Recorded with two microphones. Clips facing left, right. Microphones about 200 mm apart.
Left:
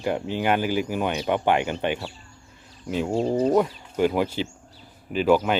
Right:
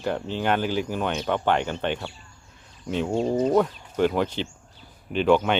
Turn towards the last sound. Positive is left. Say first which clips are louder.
# even
turn(degrees=5)  # may be behind; listen again after turning